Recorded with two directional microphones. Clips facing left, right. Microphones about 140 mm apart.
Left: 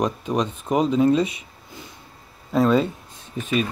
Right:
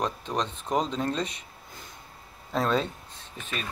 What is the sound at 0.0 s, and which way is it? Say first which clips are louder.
Speech: left 6 dB; 10° left (ahead or behind).